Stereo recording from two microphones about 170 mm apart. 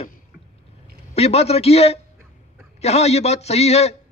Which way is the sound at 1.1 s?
35° left (ahead or behind).